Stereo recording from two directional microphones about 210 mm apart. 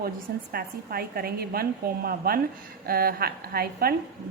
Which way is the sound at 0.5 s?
45° right (ahead or behind).